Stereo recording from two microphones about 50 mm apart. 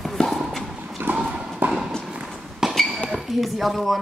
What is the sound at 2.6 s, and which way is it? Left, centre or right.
Basketball bounce, centre.